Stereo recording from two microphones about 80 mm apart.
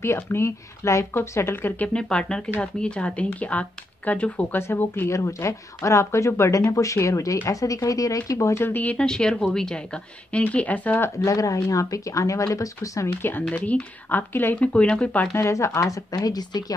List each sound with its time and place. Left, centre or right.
0.0 s speech: left
2.0 s a woman's voice: centre; by 5.1 s left
5.1 s speech: left
8.6 s speech: left
9.0 s a woman's voice: centre
11.2 s speech: left
13.2 s speech: left
15.3 s speech: left